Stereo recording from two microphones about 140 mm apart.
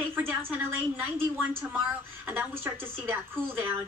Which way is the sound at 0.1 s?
15° right (ahead or behind).